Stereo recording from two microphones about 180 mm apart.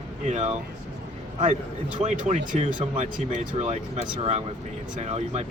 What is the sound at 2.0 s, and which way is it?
Speech, 40° right (ahead or behind).